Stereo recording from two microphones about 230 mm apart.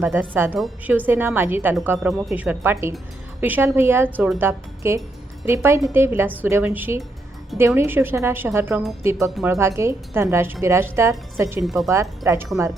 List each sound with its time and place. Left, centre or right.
0.0 s a woman's voice: centre
11.6 s speech: centre
11.9 s a woman's voice: centre